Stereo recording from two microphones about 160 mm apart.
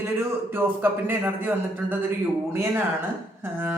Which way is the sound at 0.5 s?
15° right (ahead or behind).